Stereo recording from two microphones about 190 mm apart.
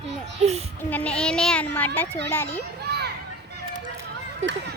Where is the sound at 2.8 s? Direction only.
60° right (ahead or behind).